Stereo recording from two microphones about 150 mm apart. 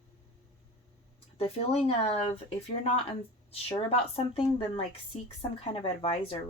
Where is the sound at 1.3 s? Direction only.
40° left (ahead or behind).